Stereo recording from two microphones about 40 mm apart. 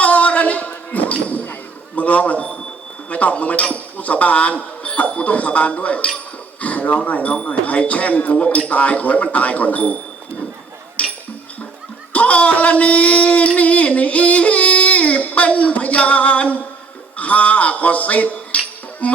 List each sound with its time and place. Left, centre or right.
0.0 s basketball bounce: left
2.0 s a man's voice: left
11.0 s music: left
12.1 s speech: left